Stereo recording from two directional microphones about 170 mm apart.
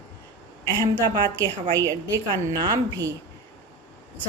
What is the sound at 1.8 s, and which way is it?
A woman's voice, 20° right (ahead or behind).